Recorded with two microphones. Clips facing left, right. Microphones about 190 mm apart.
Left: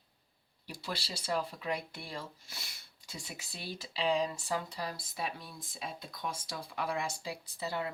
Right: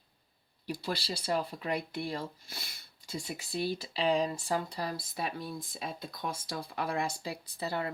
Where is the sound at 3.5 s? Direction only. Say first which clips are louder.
Right 9 dB; 50° right (ahead or behind).